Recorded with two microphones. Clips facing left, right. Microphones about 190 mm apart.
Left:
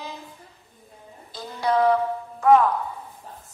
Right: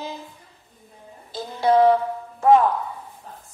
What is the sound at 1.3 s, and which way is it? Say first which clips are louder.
Music: right 5 dB; 30° right (ahead or behind).